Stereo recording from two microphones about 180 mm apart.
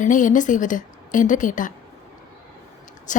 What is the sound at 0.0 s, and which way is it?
Speech, 45° left (ahead or behind).